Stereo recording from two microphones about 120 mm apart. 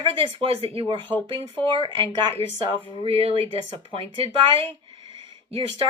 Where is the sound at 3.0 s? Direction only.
50° right (ahead or behind).